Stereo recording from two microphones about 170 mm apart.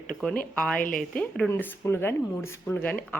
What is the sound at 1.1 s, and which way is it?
Speech, 5° left (ahead or behind).